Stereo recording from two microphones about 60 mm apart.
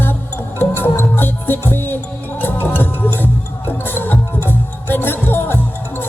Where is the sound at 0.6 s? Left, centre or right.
Left.